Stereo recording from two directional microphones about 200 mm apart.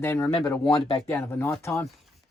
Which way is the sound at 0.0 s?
10° left (ahead or behind).